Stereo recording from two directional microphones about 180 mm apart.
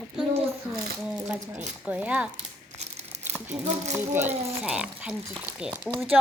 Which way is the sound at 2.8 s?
35° right (ahead or behind).